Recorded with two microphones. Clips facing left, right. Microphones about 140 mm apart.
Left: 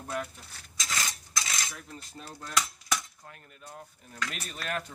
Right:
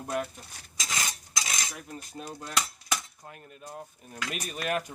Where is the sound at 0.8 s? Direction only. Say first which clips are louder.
Even; 15° right (ahead or behind).